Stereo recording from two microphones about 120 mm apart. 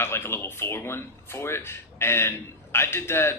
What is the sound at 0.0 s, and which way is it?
Speech, 20° left (ahead or behind).